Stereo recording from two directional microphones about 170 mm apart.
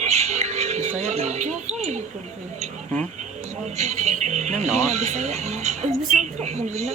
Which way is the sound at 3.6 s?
40° right (ahead or behind).